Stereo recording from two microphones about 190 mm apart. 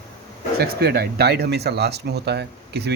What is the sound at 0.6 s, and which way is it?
Speech, 55° right (ahead or behind).